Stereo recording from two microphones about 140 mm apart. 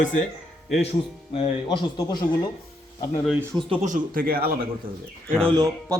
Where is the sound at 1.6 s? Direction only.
30° left (ahead or behind).